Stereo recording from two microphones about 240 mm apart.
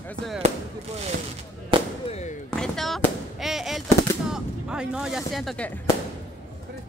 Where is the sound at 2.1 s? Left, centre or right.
Left.